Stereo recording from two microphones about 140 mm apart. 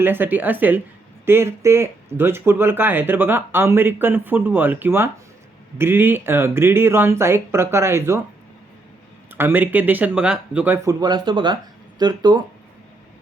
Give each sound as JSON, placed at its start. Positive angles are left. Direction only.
{"t": 0.0, "sound": "speech", "side_deg": -15}
{"t": 9.3, "sound": "speech", "side_deg": -15}
{"t": 10.8, "sound": "speech", "side_deg": -30}